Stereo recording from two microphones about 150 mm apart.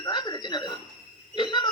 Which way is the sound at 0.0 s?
30° left (ahead or behind).